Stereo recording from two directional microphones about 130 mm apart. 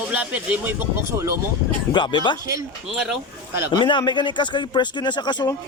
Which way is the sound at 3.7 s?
35° left (ahead or behind).